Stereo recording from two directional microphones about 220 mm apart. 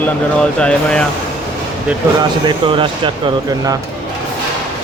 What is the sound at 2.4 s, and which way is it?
Speech, 20° right (ahead or behind).